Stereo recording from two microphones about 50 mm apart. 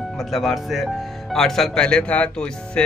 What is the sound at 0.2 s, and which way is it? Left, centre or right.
Speech, centre.